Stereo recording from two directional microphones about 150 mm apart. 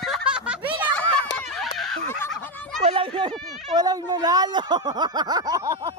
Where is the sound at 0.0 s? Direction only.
5° right (ahead or behind).